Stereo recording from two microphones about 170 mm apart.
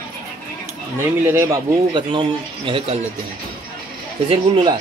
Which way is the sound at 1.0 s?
15° right (ahead or behind).